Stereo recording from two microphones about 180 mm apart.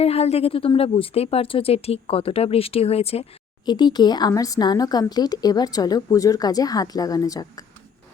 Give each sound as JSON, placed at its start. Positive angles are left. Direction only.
{"t": 0.0, "sound": "a woman's voice", "side_deg": 35}